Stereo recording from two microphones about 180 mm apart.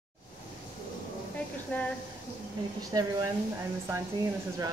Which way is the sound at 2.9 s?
20° right (ahead or behind).